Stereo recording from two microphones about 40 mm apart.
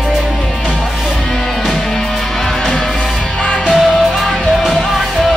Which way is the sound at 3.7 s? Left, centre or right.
Centre.